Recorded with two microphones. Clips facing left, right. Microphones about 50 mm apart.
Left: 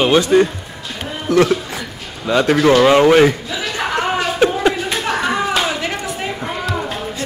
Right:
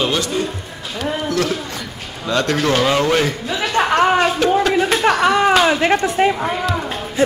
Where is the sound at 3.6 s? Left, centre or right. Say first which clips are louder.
Right 5 dB; right.